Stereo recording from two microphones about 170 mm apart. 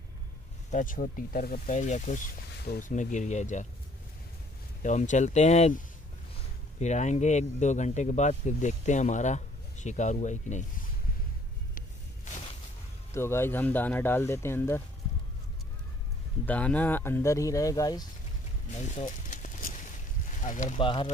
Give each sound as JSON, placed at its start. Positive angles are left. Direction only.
{"t": 0.7, "sound": "speech", "side_deg": 50}
{"t": 4.8, "sound": "speech", "side_deg": 45}
{"t": 6.8, "sound": "speech", "side_deg": 45}
{"t": 13.1, "sound": "speech", "side_deg": 15}
{"t": 16.4, "sound": "speech", "side_deg": 10}
{"t": 18.7, "sound": "a sound", "side_deg": 40}
{"t": 20.4, "sound": "speech", "side_deg": 45}
{"t": 20.7, "sound": "speech", "side_deg": 30}